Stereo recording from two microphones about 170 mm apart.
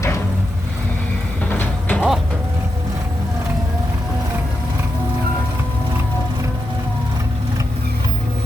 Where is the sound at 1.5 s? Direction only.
10° left (ahead or behind).